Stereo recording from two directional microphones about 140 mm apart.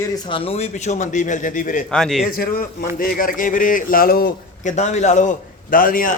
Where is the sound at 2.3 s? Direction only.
90° left.